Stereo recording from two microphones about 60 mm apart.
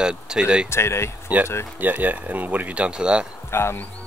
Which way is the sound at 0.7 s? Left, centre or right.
Left.